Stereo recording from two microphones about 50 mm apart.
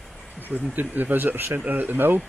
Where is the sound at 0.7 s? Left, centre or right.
Right.